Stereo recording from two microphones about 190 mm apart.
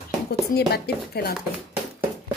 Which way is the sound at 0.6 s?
55° left (ahead or behind).